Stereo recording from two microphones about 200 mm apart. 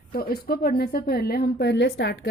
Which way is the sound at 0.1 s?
50° left (ahead or behind).